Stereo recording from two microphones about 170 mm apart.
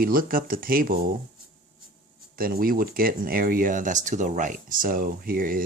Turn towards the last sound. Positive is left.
turn(degrees=-55)  # may be behind; listen again after turning